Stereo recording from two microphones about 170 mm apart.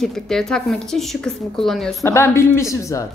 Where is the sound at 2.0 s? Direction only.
15° left (ahead or behind).